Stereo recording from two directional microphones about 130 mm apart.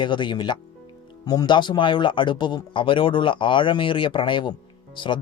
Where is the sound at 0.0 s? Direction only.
35° left (ahead or behind).